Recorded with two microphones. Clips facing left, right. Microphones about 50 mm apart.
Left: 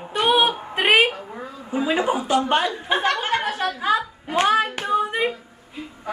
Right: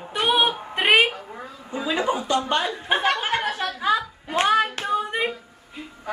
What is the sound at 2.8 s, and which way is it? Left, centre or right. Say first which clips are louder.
Speech: left 1 dB; centre.